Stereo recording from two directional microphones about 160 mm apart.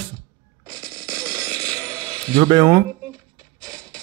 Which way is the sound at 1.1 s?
20° right (ahead or behind).